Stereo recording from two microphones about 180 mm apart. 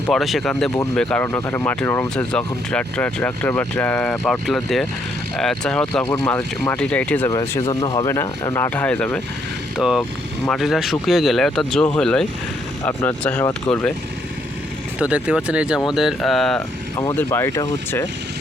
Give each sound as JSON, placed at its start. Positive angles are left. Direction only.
{"t": 0.1, "sound": "speech", "side_deg": 0}
{"t": 7.3, "sound": "speech", "side_deg": 20}
{"t": 9.7, "sound": "speech", "side_deg": 0}
{"t": 14.9, "sound": "speech", "side_deg": -5}
{"t": 16.6, "sound": "speech", "side_deg": 15}